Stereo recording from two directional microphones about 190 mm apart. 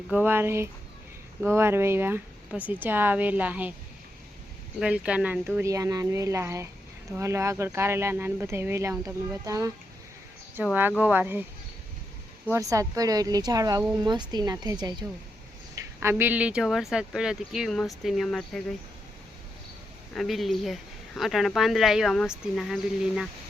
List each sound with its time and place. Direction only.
0.1 s speech: 10° right (ahead or behind)
4.8 s speech: 5° right (ahead or behind)
12.5 s a woman's voice: 15° right (ahead or behind)
16.0 s speech: 10° right (ahead or behind)
20.1 s speech: centre (ahead or behind)